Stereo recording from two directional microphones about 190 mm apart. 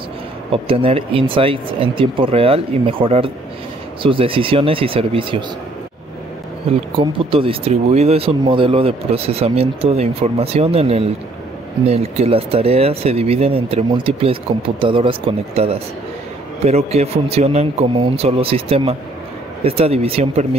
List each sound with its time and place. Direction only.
0.5 s speech: 30° right (ahead or behind)
6.7 s speech: 30° right (ahead or behind)